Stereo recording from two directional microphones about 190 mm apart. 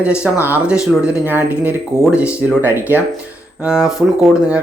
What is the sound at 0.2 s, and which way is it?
Speech, 10° right (ahead or behind).